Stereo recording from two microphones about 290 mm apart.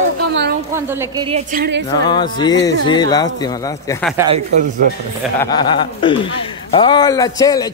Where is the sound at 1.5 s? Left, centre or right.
Right.